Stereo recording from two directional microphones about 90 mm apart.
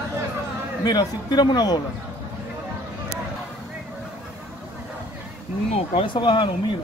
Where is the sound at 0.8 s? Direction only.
50° left (ahead or behind).